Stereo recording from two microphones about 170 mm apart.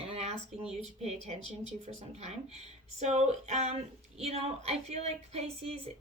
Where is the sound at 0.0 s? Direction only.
35° right (ahead or behind).